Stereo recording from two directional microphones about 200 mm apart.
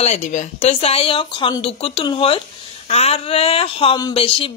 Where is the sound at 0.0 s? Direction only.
35° left (ahead or behind).